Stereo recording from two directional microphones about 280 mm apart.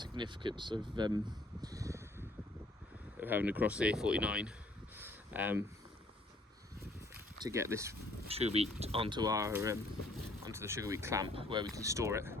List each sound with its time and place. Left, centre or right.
0.0 s speech: centre
1.6 s a sound: centre
3.2 s speech: centre
4.9 s a sound: centre
7.4 s speech: centre
8.3 s speech: right